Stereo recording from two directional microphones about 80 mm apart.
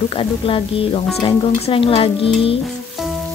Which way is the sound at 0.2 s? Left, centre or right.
Left.